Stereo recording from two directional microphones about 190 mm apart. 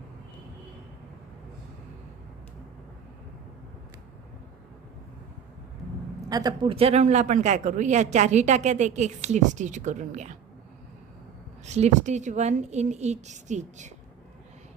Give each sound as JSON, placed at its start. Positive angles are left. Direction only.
{"t": 6.2, "sound": "a man's voice", "side_deg": -20}
{"t": 11.6, "sound": "a man's voice", "side_deg": -35}